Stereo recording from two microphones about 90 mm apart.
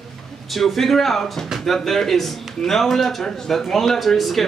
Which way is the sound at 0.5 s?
Centre (ahead or behind).